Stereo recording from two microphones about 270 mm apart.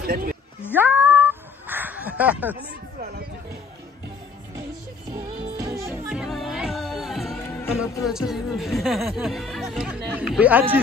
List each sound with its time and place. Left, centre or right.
0.0 s a sound: right
0.7 s cat: centre
5.6 s music: centre
8.0 s speech: centre